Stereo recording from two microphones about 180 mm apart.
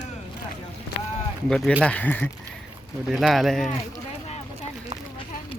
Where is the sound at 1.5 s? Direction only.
5° left (ahead or behind).